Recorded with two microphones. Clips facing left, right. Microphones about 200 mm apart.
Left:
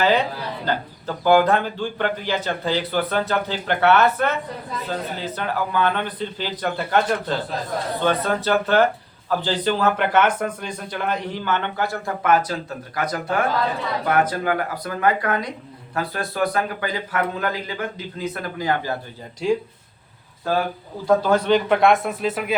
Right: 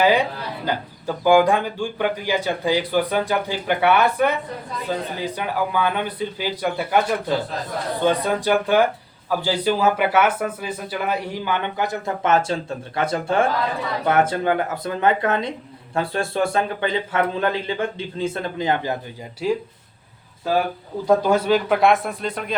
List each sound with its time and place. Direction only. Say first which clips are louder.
0.0 s a man's voice: right 1 dB; 10° right (ahead or behind)
19.4 s a man's voice: left 1 dB; 5° right (ahead or behind)
21.1 s a man's voice: even; 10° right (ahead or behind); by 22.5 s 5° left (ahead or behind)